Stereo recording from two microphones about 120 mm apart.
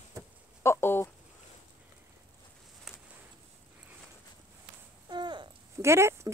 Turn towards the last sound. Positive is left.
turn(degrees=-20)  # may be behind; listen again after turning